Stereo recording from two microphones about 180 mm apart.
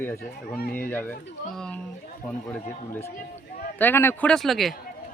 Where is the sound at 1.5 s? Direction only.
5° left (ahead or behind).